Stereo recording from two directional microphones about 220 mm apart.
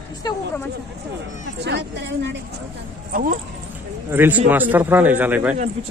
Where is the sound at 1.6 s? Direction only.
50° right (ahead or behind).